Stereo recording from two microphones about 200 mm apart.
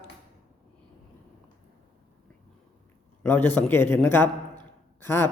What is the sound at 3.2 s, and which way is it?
Speech, 10° left (ahead or behind).